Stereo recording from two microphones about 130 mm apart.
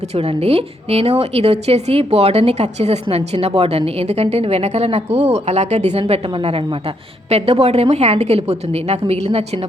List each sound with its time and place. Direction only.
0.1 s a woman's voice: 50° right (ahead or behind)